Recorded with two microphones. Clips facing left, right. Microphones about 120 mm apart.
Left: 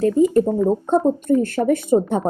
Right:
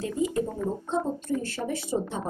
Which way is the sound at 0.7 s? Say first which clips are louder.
Left 11 dB; 50° left (ahead or behind).